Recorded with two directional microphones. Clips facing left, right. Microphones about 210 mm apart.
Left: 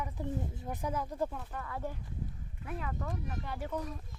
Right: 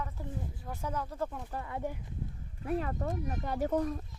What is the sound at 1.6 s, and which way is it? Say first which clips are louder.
Speech: right 3 dB; 20° right (ahead or behind).